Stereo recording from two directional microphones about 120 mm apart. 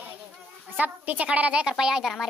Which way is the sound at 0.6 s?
15° right (ahead or behind).